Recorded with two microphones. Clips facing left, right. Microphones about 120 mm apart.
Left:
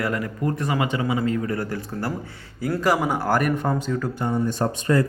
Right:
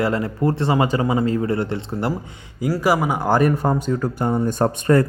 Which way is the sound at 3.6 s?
35° right (ahead or behind).